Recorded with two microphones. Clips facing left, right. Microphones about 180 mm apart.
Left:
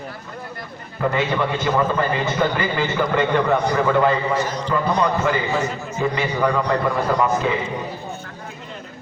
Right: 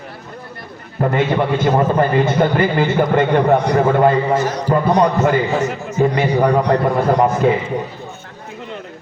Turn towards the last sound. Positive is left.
turn(degrees=-50)  # may be behind; listen again after turning